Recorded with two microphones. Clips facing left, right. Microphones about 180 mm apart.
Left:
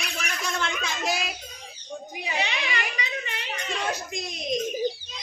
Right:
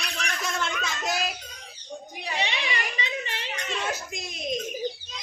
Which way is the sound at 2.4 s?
25° right (ahead or behind).